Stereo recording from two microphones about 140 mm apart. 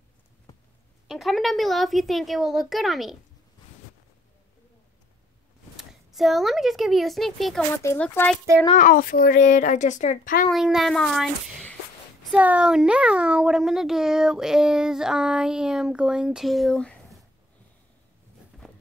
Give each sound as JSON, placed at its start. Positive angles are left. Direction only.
{"t": 1.0, "sound": "a child's voice", "side_deg": 0}
{"t": 5.8, "sound": "speech", "side_deg": 0}
{"t": 7.7, "sound": "speech", "side_deg": 15}
{"t": 8.7, "sound": "a woman's voice", "side_deg": 70}
{"t": 10.5, "sound": "a child's voice", "side_deg": 0}
{"t": 12.3, "sound": "a child's voice", "side_deg": -10}